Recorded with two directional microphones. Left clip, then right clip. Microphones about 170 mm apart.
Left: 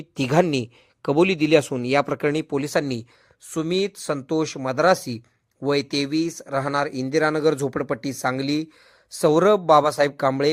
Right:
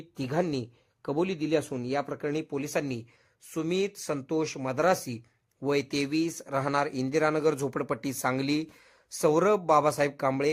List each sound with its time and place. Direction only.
0.2 s speech: 30° left (ahead or behind)